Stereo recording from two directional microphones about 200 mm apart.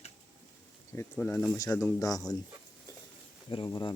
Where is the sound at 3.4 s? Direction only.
25° left (ahead or behind).